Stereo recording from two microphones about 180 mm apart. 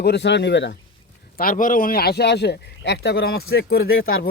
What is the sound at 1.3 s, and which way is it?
A man's voice, 50° left (ahead or behind).